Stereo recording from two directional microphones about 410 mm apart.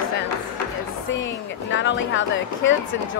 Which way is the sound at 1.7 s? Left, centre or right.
Left.